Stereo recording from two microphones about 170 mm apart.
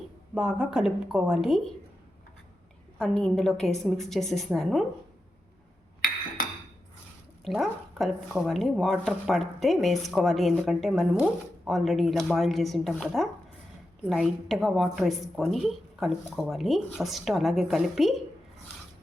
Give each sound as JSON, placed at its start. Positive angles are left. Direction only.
{"t": 0.3, "sound": "speech", "side_deg": -5}
{"t": 3.0, "sound": "speech", "side_deg": 5}
{"t": 6.0, "sound": "a sound", "side_deg": 50}
{"t": 7.4, "sound": "speech", "side_deg": 0}